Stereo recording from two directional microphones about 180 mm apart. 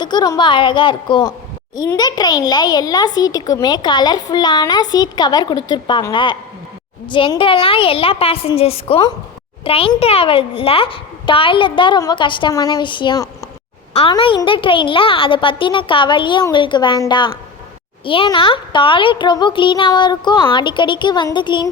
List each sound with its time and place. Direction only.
0.0 s a child's voice: 25° left (ahead or behind)